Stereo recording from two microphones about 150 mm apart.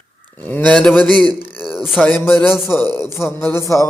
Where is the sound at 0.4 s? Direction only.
10° left (ahead or behind).